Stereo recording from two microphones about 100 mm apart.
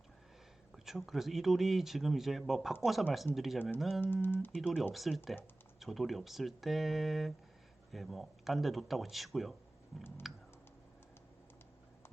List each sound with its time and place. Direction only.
0.9 s speech: centre (ahead or behind)
4.0 s speech: 20° left (ahead or behind)
4.5 s speech: 5° right (ahead or behind)